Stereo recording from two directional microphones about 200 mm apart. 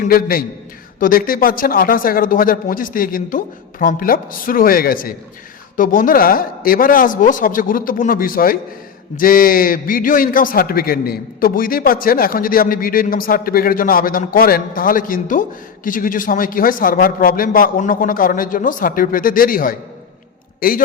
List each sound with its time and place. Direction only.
0.0 s a man's voice: 45° left (ahead or behind)